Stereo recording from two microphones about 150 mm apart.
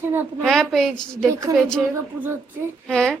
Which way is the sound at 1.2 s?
20° right (ahead or behind).